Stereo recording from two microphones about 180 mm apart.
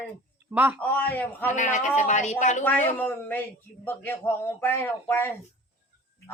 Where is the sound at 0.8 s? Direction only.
10° left (ahead or behind).